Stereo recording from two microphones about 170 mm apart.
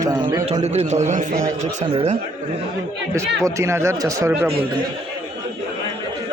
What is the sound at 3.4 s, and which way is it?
Speech, 15° right (ahead or behind).